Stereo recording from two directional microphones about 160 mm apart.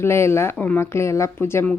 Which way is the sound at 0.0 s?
15° left (ahead or behind).